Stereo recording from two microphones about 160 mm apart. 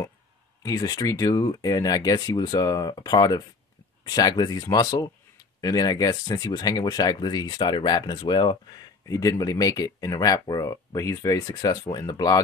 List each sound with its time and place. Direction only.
0.7 s speech: 20° left (ahead or behind)